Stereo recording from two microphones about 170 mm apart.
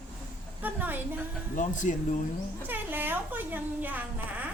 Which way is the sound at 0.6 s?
10° right (ahead or behind).